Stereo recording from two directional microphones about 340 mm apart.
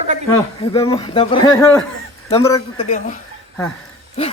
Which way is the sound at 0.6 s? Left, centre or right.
Centre.